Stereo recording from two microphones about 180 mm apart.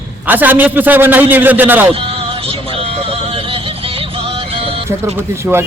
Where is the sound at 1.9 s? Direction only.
30° right (ahead or behind).